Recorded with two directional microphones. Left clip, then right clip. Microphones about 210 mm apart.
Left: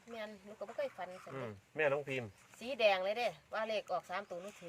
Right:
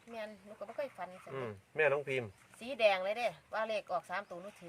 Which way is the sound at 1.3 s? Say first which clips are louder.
Right 3 dB; 50° right (ahead or behind).